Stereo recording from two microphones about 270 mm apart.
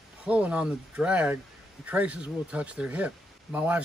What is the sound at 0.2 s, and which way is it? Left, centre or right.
Speech, centre.